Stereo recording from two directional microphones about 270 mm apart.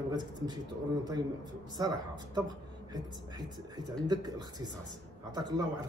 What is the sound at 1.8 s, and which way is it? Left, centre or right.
Speech, centre.